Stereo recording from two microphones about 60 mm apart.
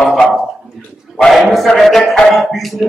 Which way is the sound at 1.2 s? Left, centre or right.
Centre.